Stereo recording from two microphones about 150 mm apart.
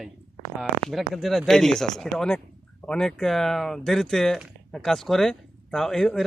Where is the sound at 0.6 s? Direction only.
Centre (ahead or behind).